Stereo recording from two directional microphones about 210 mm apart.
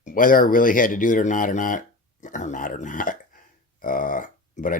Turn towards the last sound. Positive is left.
turn(degrees=40)  # may be behind; listen again after turning